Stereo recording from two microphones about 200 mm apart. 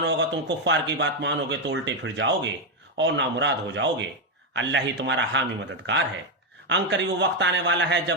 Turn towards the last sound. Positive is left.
turn(degrees=-65)  # may be behind; listen again after turning